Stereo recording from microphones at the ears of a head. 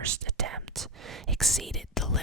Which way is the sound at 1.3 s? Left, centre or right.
Centre.